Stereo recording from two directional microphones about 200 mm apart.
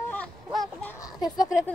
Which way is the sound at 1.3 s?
20° left (ahead or behind).